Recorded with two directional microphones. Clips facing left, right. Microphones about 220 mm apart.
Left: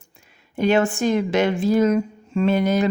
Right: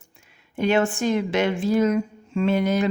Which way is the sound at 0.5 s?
40° left (ahead or behind).